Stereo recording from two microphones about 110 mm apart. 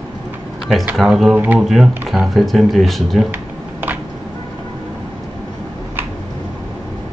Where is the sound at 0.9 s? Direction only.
5° right (ahead or behind).